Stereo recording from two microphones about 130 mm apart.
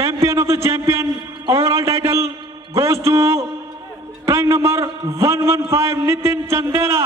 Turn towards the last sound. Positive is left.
turn(degrees=-20)  # may be behind; listen again after turning